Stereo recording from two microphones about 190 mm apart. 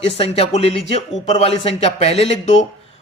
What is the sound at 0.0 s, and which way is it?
A man's voice, 30° left (ahead or behind).